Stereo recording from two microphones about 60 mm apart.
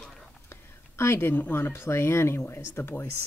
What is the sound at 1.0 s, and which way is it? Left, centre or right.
Speech, left.